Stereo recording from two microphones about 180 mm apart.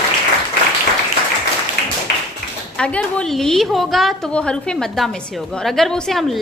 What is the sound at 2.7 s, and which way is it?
A woman's voice, 5° left (ahead or behind).